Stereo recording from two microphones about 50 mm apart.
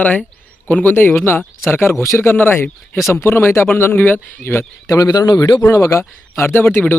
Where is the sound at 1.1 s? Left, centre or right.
Left.